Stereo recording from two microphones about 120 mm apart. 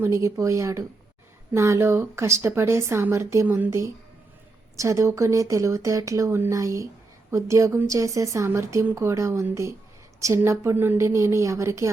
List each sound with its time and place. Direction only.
0.0 s speech: 25° right (ahead or behind)